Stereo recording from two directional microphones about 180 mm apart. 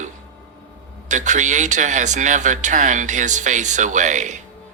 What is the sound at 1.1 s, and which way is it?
Speech, 40° right (ahead or behind).